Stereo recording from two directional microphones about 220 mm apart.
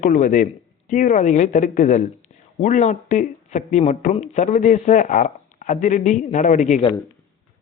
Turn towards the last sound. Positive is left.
turn(degrees=35)  # may be behind; listen again after turning